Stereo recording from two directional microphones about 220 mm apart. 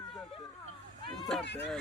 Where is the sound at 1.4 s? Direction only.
50° left (ahead or behind).